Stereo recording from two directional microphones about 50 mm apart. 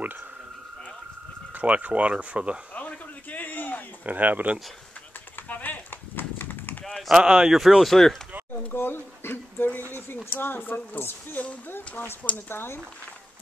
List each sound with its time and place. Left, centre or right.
1.5 s speech: right
2.7 s a sound: left
4.0 s speech: right
5.5 s clip-clop: left
7.1 s speech: centre
8.7 s a sound: left
9.8 s speech: left